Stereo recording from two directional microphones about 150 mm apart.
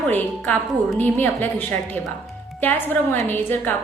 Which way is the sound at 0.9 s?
10° left (ahead or behind).